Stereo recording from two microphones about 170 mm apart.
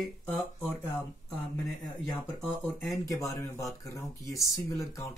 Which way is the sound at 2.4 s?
5° left (ahead or behind).